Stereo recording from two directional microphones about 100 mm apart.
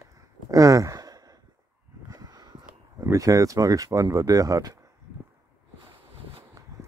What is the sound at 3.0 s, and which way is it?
Speech, 35° right (ahead or behind).